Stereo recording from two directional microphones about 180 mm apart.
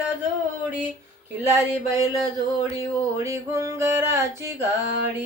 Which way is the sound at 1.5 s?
20° right (ahead or behind).